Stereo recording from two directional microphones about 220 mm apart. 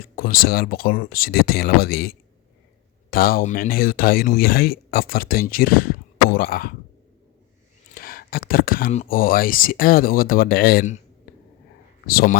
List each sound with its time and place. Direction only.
0.0 s speech: 40° left (ahead or behind)
7.9 s speech: 40° left (ahead or behind)
12.0 s speech: 40° left (ahead or behind)